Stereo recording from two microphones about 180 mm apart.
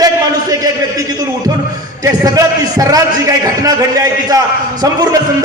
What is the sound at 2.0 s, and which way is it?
A man's voice, 20° right (ahead or behind).